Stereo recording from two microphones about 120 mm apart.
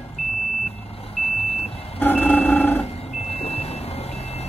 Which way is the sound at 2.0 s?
15° left (ahead or behind).